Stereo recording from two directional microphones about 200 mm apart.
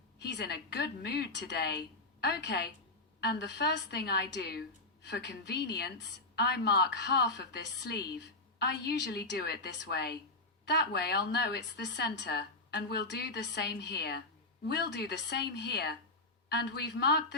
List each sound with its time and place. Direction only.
0.2 s a woman's voice: 60° left (ahead or behind)